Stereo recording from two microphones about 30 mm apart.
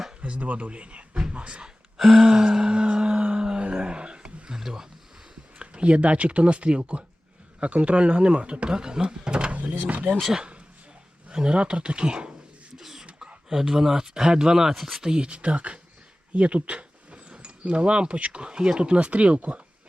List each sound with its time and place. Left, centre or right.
0.2 s speech: right
2.0 s a sound: centre; by 4.5 s right
4.5 s a sound: centre
5.5 s speech: right
8.7 s speech: right
9.5 s speech: right
11.3 s speech: right
12.7 s beatboxing: centre
13.5 s speech: centre
14.8 s speech: centre
15.0 s speech: right
16.3 s a sound: right
17.3 s speech: right